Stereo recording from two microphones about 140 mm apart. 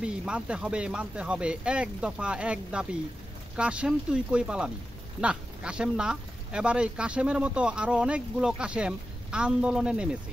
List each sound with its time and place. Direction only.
0.0 s speech: 5° right (ahead or behind)